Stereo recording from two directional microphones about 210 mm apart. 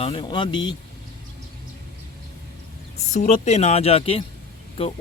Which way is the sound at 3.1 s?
35° left (ahead or behind).